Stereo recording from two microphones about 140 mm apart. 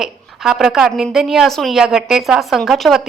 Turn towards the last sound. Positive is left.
turn(degrees=0)  # may be behind; listen again after turning